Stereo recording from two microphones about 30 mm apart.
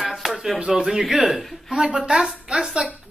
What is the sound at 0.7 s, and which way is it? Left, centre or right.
Speech, centre.